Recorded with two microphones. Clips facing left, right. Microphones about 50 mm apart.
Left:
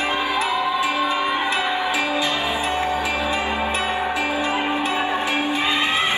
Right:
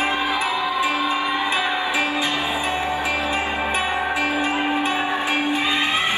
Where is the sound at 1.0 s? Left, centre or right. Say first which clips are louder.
Left 1 dB; left.